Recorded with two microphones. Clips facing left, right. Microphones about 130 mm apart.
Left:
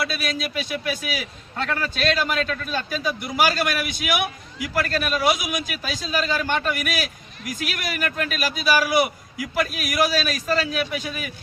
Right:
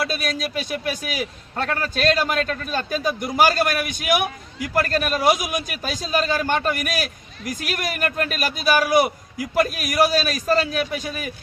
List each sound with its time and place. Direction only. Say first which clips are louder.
0.1 s a man's voice: right 2 dB; 45° right (ahead or behind)